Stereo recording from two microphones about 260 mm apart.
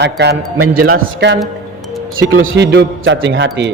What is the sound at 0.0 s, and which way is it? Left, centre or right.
A man's voice, right.